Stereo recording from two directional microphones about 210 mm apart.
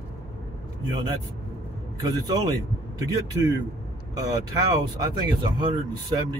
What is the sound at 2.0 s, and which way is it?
Speech, 20° right (ahead or behind).